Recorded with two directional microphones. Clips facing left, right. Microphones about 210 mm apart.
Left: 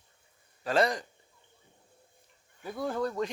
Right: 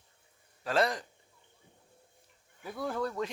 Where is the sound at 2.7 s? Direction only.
20° left (ahead or behind).